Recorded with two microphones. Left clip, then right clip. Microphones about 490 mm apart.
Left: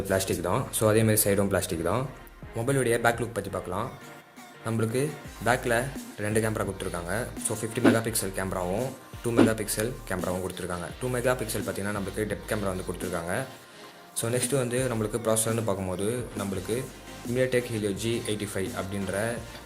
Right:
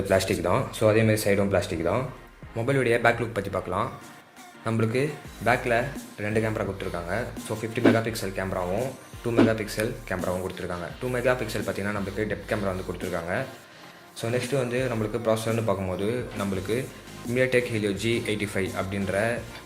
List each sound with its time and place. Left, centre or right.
0.1 s speech: left